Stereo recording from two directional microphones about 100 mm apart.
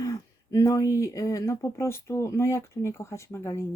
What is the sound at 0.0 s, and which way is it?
Speech, 30° left (ahead or behind).